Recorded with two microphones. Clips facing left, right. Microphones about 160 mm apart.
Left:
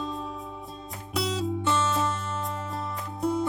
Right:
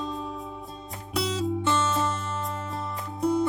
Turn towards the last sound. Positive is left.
turn(degrees=0)  # may be behind; listen again after turning